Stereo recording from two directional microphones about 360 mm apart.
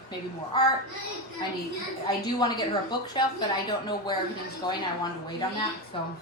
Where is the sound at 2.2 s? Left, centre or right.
Centre.